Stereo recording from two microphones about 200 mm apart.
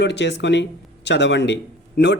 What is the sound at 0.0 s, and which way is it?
Speech, 60° left (ahead or behind).